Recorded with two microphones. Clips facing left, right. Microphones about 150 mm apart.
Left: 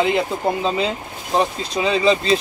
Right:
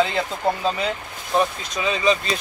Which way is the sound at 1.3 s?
30° left (ahead or behind).